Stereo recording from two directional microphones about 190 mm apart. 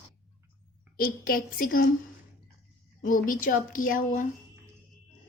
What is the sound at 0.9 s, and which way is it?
Speech, 50° left (ahead or behind).